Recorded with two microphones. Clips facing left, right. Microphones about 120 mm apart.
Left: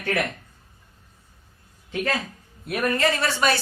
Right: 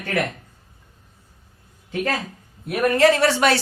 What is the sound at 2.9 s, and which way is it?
Speech, 75° right (ahead or behind).